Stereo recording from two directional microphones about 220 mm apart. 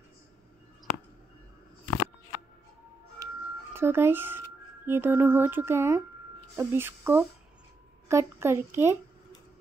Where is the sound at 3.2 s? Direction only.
15° right (ahead or behind).